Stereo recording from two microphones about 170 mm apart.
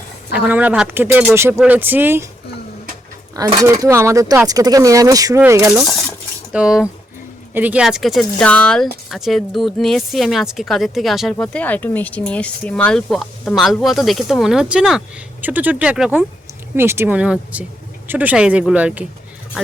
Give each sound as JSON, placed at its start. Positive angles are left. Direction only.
{"t": 0.3, "sound": "speech", "side_deg": -10}
{"t": 3.3, "sound": "speech", "side_deg": -20}
{"t": 6.5, "sound": "speech", "side_deg": -5}